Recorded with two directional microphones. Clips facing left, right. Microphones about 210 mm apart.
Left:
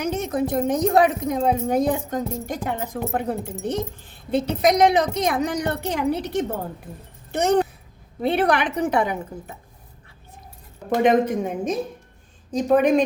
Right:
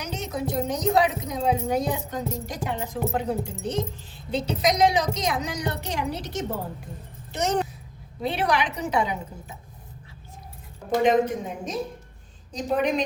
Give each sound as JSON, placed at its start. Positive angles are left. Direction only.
{"t": 0.0, "sound": "a woman's voice", "side_deg": 55}
{"t": 11.0, "sound": "a woman's voice", "side_deg": 55}